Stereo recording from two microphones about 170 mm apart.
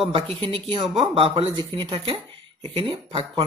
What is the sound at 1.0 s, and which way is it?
Speech, 35° right (ahead or behind).